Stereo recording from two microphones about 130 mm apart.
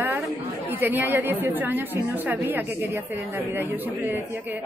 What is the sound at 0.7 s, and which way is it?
A woman's voice, 15° right (ahead or behind).